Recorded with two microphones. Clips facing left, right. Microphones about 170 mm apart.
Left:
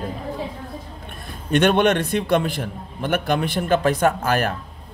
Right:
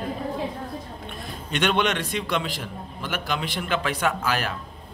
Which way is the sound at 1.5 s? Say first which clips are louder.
Left 7 dB; 50° left (ahead or behind).